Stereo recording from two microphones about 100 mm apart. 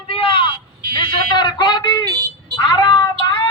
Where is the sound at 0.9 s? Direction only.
50° left (ahead or behind).